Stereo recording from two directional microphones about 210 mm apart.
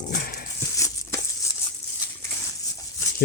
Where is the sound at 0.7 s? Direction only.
15° left (ahead or behind).